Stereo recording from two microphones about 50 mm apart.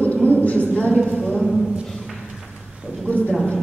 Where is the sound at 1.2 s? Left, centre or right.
Centre.